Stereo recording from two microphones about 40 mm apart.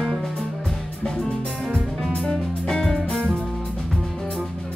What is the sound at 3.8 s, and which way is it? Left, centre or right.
Music, centre.